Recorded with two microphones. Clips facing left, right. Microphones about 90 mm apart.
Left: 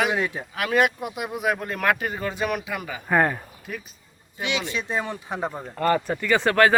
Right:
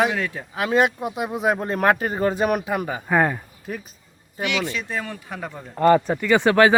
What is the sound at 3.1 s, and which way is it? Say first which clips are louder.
Speech: even; centre (ahead or behind).